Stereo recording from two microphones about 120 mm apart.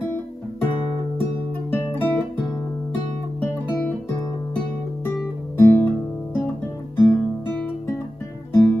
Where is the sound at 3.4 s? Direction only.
20° left (ahead or behind).